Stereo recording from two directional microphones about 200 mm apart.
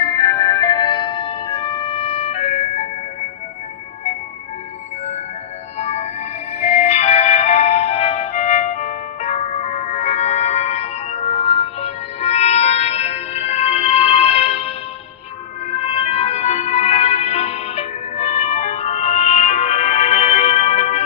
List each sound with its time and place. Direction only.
0.0 s music: 20° left (ahead or behind)
5.8 s music: 35° left (ahead or behind)
15.7 s music: 30° left (ahead or behind)